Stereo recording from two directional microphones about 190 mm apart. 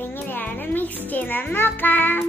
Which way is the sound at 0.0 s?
10° left (ahead or behind).